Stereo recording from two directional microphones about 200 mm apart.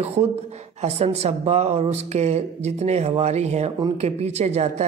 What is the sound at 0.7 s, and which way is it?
Speech, 30° right (ahead or behind).